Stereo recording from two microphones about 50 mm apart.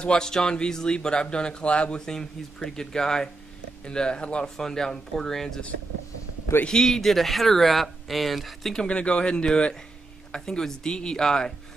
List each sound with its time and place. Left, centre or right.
0.0 s speech: centre
2.0 s speech: centre
6.6 s speech: centre
8.8 s speech: left